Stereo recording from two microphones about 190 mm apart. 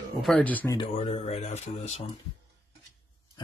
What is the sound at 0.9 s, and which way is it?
Speech, 35° left (ahead or behind).